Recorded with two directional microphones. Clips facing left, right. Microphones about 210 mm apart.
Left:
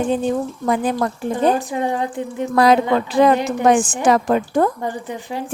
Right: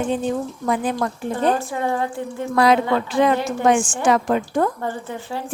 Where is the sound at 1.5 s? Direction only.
20° left (ahead or behind).